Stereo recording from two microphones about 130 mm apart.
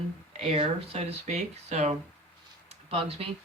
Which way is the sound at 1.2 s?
60° right (ahead or behind).